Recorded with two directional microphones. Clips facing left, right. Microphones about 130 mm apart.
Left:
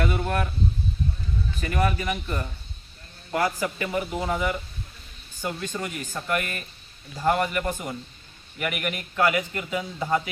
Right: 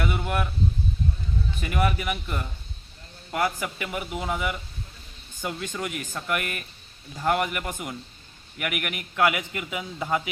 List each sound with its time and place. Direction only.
0.0 s a man's voice: 5° right (ahead or behind)
1.6 s a man's voice: 10° right (ahead or behind)
5.5 s a man's voice: 5° right (ahead or behind)